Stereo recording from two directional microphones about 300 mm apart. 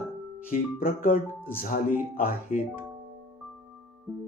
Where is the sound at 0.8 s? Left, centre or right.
Left.